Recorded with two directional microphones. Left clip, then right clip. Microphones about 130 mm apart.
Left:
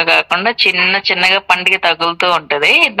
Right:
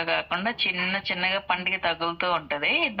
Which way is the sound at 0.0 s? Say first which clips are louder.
Left 14 dB; 80° left.